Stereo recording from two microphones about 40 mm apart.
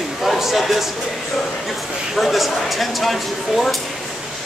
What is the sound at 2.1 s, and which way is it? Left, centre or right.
Speech, centre.